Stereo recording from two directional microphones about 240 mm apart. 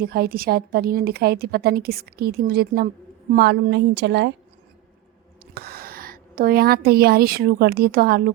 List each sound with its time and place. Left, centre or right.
0.0 s a woman's voice: right
5.5 s a woman's voice: right